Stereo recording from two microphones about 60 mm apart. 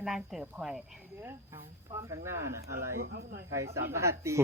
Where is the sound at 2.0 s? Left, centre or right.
Right.